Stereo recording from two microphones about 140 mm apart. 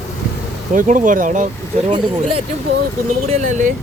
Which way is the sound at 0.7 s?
70° right (ahead or behind).